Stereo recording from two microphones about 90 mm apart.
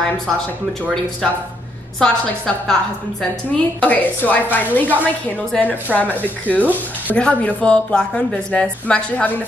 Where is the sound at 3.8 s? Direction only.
15° left (ahead or behind).